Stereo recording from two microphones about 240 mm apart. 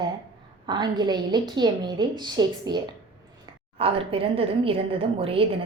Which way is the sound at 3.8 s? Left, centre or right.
Right.